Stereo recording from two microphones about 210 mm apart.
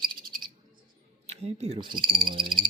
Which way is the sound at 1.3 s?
30° right (ahead or behind).